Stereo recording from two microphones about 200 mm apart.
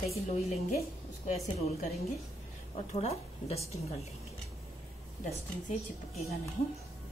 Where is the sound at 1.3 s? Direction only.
30° left (ahead or behind).